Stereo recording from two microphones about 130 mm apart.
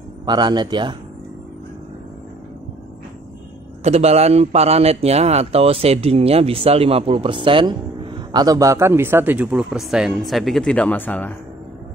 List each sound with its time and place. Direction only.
0.2 s a man's voice: 35° right (ahead or behind)
3.8 s a man's voice: 55° right (ahead or behind); by 11.3 s 15° left (ahead or behind)